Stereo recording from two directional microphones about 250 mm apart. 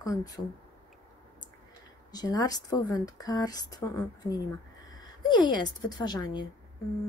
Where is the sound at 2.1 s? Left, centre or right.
Centre.